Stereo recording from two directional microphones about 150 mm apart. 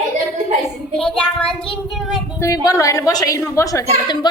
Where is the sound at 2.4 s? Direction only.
20° left (ahead or behind).